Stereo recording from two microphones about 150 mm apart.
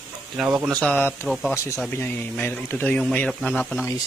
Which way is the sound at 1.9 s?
10° left (ahead or behind).